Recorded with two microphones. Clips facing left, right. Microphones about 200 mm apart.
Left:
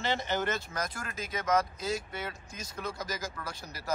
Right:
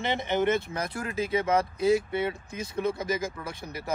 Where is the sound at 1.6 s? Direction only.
60° right (ahead or behind).